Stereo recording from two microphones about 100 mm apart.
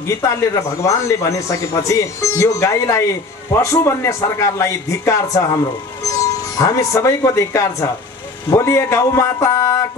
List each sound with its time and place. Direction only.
0.2 s a man's voice: 30° left (ahead or behind)